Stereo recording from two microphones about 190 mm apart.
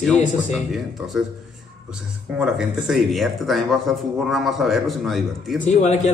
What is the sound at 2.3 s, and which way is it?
Speech, 5° right (ahead or behind).